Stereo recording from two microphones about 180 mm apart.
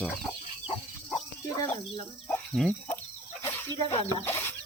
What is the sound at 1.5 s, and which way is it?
Bird, 20° left (ahead or behind).